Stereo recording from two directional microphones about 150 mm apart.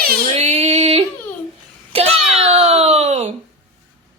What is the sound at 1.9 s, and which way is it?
Wail, 40° right (ahead or behind).